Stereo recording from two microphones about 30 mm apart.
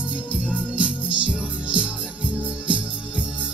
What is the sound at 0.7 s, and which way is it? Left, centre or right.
Music, right.